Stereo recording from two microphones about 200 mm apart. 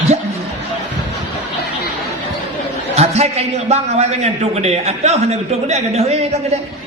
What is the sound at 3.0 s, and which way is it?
A man's voice, 30° right (ahead or behind).